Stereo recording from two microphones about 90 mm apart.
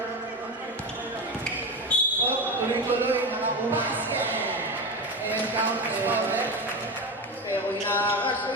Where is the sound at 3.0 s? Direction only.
20° right (ahead or behind).